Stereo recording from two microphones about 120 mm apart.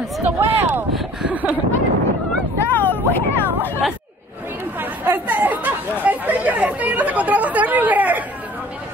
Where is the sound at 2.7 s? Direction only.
15° left (ahead or behind).